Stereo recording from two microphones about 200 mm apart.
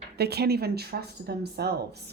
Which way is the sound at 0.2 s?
55° right (ahead or behind).